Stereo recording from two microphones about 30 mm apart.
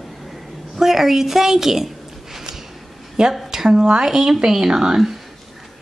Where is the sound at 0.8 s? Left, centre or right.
Centre.